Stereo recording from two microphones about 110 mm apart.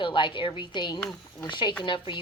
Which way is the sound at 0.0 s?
50° left (ahead or behind).